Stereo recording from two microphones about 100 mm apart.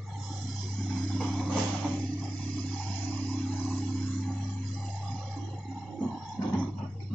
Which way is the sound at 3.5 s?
15° left (ahead or behind).